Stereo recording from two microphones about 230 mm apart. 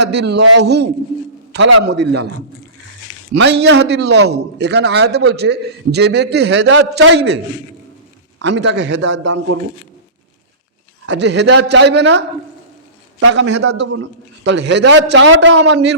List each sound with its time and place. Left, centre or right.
0.0 s a man's voice: right
3.3 s a man's voice: right
8.4 s a man's voice: right
11.0 s a man's voice: right